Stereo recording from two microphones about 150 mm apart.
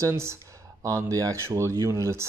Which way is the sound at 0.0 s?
20° right (ahead or behind).